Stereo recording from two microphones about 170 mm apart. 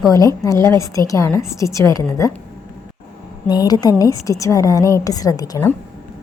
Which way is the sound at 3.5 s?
20° left (ahead or behind).